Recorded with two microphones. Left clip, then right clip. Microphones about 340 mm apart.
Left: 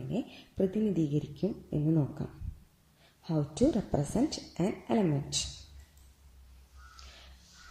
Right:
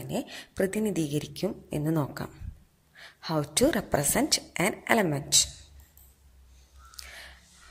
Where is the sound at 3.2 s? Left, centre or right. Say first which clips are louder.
Right 4 dB; right.